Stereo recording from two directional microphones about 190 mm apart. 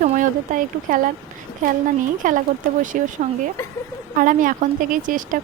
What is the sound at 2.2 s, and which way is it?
Speech, 45° right (ahead or behind).